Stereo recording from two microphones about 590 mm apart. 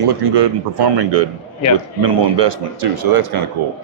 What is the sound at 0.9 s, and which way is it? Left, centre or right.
Speech, right.